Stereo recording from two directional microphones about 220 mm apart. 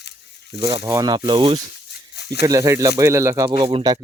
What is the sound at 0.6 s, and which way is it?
Speech, 20° right (ahead or behind).